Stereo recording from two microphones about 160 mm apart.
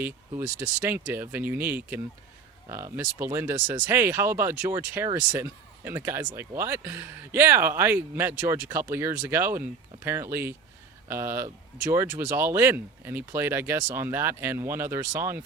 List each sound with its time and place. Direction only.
0.0 s speech: 15° right (ahead or behind)